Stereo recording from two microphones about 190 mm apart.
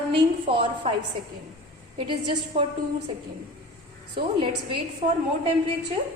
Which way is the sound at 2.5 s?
30° right (ahead or behind).